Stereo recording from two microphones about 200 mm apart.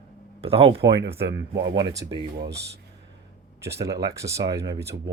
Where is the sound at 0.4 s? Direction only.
30° right (ahead or behind).